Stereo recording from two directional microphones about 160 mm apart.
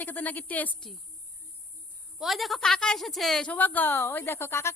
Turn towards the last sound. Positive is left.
turn(degrees=15)  # may be behind; listen again after turning